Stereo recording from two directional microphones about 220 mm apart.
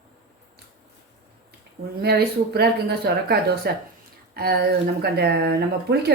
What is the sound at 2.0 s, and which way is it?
Speech, 45° right (ahead or behind).